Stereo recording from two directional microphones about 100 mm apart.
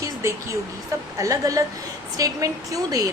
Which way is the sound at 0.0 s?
30° right (ahead or behind).